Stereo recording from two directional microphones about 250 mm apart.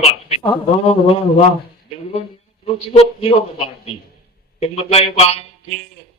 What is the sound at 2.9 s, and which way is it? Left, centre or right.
Speech, left.